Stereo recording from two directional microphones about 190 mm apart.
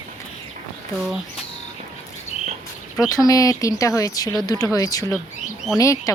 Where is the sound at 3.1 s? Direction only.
20° left (ahead or behind).